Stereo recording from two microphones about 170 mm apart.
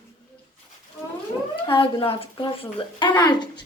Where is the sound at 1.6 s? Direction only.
30° left (ahead or behind).